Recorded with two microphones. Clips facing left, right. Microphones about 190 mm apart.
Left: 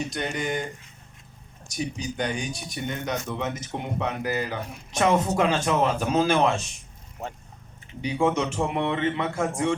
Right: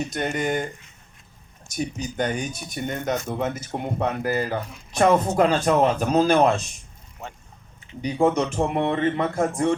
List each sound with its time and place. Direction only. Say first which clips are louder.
0.1 s speech: right 4 dB; 50° right (ahead or behind)
1.7 s speech: right 2 dB; 45° right (ahead or behind)
7.2 s speech: left 3 dB; 40° left (ahead or behind)
8.0 s speech: right 3 dB; 40° right (ahead or behind)